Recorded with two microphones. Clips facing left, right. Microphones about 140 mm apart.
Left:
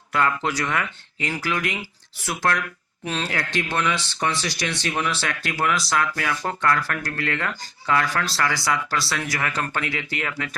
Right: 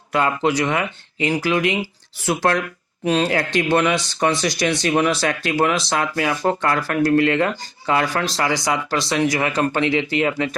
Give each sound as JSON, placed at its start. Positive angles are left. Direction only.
{"t": 0.1, "sound": "speech", "side_deg": -20}